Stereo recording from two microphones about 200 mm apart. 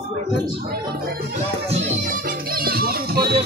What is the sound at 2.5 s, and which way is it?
Speech, 50° right (ahead or behind).